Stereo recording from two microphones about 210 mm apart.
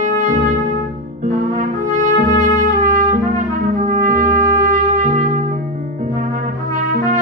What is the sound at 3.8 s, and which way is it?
Trumpet, 35° right (ahead or behind).